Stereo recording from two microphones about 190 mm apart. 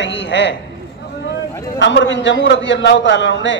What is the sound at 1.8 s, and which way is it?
A man's voice, 70° left (ahead or behind).